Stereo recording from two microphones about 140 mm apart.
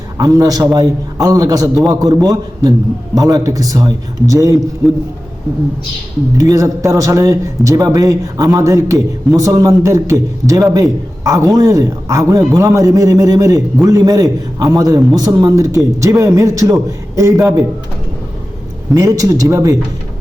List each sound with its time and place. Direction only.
0.2 s speech: 25° right (ahead or behind)
6.3 s speech: 25° right (ahead or behind)
18.9 s speech: 25° right (ahead or behind)